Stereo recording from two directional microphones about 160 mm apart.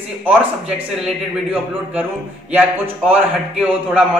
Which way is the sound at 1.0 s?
10° right (ahead or behind).